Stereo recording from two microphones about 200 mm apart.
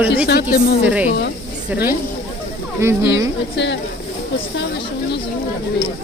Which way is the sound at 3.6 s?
60° left (ahead or behind).